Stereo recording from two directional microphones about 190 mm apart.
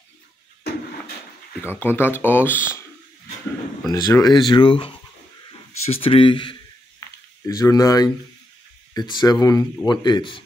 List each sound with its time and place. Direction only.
1.6 s speech: 10° left (ahead or behind)
3.8 s speech: 20° left (ahead or behind)